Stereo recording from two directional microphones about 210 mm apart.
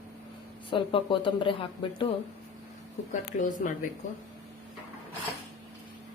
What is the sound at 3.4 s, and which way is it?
Speech, 35° left (ahead or behind).